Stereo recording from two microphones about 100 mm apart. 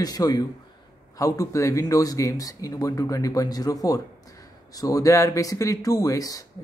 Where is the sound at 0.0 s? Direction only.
40° left (ahead or behind).